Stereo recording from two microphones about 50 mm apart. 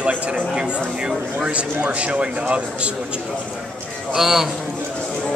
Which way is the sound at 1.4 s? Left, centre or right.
Right.